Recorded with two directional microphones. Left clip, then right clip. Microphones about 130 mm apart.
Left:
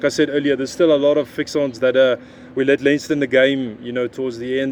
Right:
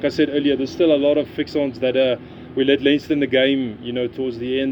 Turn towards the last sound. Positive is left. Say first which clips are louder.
# left 1 dB
turn(degrees=40)  # may be behind; listen again after turning